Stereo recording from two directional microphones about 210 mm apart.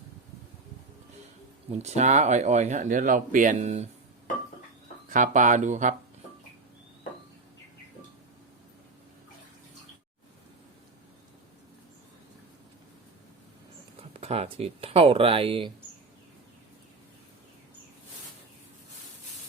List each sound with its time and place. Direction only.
1.7 s speech: 30° right (ahead or behind)
5.1 s speech: 35° right (ahead or behind)
14.2 s speech: 30° right (ahead or behind)